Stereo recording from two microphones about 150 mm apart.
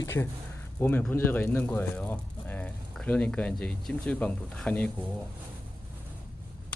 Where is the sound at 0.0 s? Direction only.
20° left (ahead or behind).